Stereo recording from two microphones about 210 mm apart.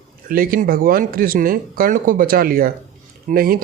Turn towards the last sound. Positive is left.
turn(degrees=-45)  # may be behind; listen again after turning